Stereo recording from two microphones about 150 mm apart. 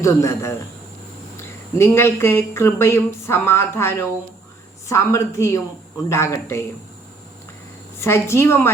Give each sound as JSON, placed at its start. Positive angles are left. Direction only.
{"t": 0.0, "sound": "speech", "side_deg": 20}
{"t": 8.0, "sound": "speech", "side_deg": 15}